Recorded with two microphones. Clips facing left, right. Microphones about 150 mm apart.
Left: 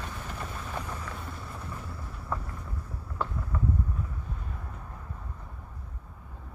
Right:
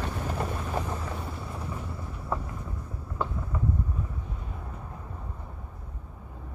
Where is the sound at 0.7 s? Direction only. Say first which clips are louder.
Right 4 dB; 30° right (ahead or behind).